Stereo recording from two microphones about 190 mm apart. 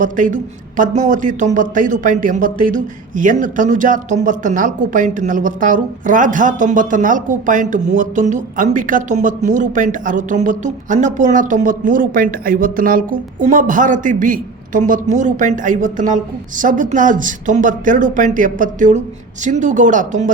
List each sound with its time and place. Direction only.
0.0 s speech: 45° right (ahead or behind)